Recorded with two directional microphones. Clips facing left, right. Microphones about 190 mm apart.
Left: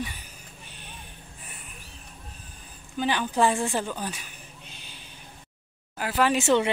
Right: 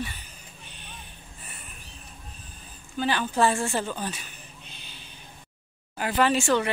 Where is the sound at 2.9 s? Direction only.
15° left (ahead or behind).